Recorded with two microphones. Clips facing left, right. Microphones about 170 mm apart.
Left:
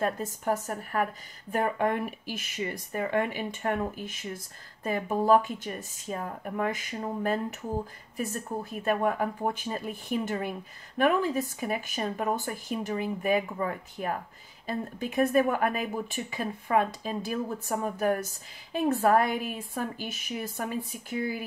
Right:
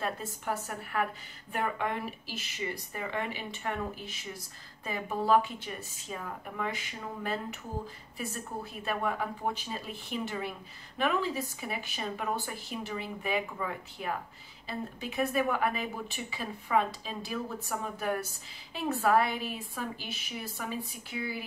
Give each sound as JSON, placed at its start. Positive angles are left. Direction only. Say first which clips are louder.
{"t": 0.0, "sound": "speech", "louder": "left 6 dB", "side_deg": 45}